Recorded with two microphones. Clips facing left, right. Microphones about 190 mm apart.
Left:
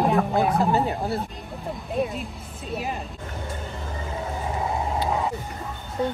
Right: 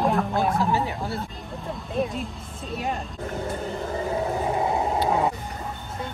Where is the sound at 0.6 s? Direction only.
55° left (ahead or behind).